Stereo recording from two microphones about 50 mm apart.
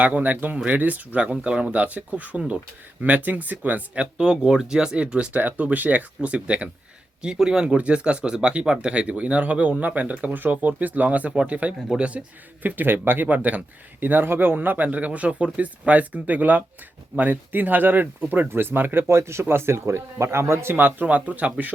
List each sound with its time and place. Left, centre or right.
0.0 s speech: right; by 1.7 s centre
1.7 s speech: right
4.2 s speech: centre
7.2 s speech: centre
12.6 s speech: right
13.2 s speech: right
14.0 s speech: right
19.0 s speech: right
20.7 s speech: right